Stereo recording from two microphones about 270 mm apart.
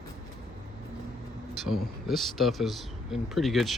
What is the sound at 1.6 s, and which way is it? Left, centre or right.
Speech, centre.